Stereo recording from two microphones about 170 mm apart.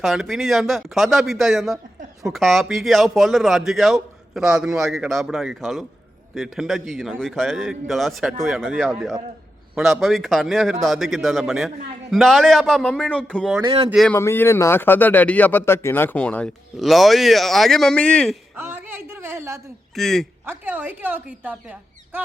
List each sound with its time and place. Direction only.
0.0 s a man's voice: centre (ahead or behind)
13.6 s speech: 25° right (ahead or behind)
13.9 s a man's voice: centre (ahead or behind)
14.2 s speech: 15° left (ahead or behind)
18.5 s a woman's voice: 10° right (ahead or behind)
20.0 s a man's voice: centre (ahead or behind)
20.4 s speech: 10° right (ahead or behind)